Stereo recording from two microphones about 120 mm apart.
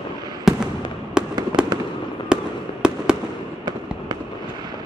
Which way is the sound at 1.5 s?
40° right (ahead or behind).